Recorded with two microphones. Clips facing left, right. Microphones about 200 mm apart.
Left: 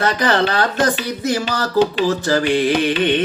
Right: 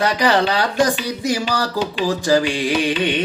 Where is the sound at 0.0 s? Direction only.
15° right (ahead or behind).